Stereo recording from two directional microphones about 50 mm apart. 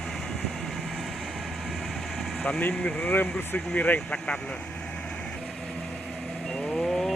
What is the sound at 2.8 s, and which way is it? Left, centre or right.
Speech, centre.